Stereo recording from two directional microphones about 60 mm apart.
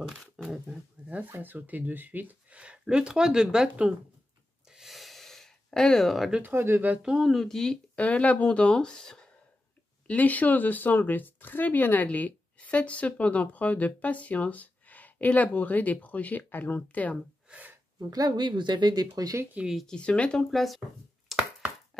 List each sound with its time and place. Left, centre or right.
0.4 s a sound: centre
1.1 s speech: right; by 3.9 s centre
4.6 s gasp: centre
6.4 s speech: right
7.0 s speech: centre
7.2 s speech: centre
8.0 s speech: left
10.0 s speech: left
17.9 s speech: right
19.6 s speech: right
19.9 s speech: centre
20.4 s speech: centre
21.3 s chopping: centre